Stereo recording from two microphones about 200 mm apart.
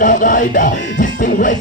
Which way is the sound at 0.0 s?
40° left (ahead or behind).